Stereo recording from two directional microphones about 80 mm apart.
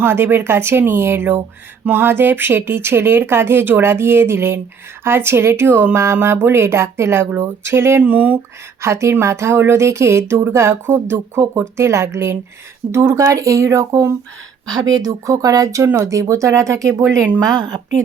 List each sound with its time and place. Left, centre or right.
0.0 s speech: right
8.0 s speech: centre
8.8 s speech: right
14.7 s speech: right